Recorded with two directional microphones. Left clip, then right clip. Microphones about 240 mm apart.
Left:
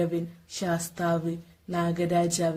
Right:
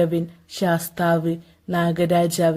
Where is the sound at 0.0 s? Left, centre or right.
Right.